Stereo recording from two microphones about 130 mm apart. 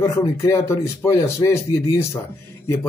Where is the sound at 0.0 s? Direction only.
30° left (ahead or behind).